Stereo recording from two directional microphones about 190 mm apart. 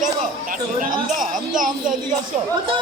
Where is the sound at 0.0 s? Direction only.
45° right (ahead or behind).